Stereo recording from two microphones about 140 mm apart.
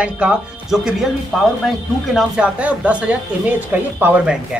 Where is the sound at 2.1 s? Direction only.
5° right (ahead or behind).